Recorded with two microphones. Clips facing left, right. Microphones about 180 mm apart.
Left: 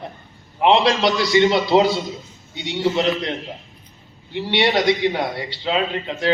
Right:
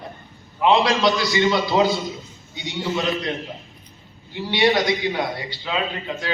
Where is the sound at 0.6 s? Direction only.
25° left (ahead or behind).